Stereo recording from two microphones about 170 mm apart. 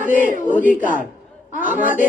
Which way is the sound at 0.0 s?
50° right (ahead or behind).